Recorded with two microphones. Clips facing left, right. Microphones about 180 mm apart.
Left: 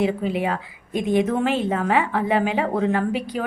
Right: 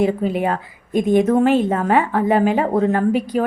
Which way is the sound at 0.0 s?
45° right (ahead or behind).